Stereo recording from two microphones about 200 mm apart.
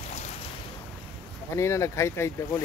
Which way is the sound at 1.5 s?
15° left (ahead or behind).